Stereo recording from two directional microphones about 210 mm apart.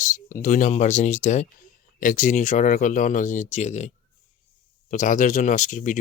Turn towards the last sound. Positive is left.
turn(degrees=35)  # may be behind; listen again after turning